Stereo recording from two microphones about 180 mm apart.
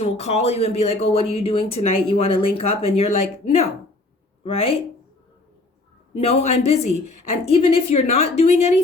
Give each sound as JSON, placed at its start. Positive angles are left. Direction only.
{"t": 0.0, "sound": "speech", "side_deg": 35}
{"t": 6.1, "sound": "speech", "side_deg": 35}